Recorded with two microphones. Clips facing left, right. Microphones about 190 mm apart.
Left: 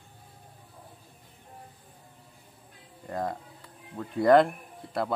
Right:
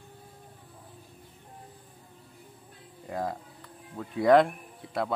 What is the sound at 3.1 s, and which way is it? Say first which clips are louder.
Music: left 1 dB; centre (ahead or behind).